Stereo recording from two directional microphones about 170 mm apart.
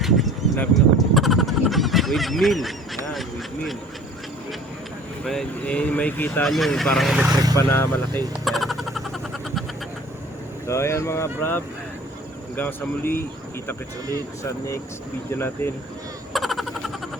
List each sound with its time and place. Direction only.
0.0 s a sound: centre (ahead or behind)
0.7 s honk: centre (ahead or behind)
3.1 s speech: centre (ahead or behind)
5.2 s speech: 5° left (ahead or behind)
7.3 s speech: 20° right (ahead or behind)
7.5 s speech: 15° left (ahead or behind)
8.4 s a sound: centre (ahead or behind)
10.7 s speech: 15° left (ahead or behind)
15.3 s speech: 15° left (ahead or behind)
16.3 s a sound: centre (ahead or behind)